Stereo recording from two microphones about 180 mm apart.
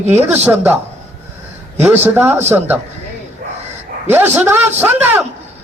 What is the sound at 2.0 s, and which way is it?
Speech, 10° right (ahead or behind).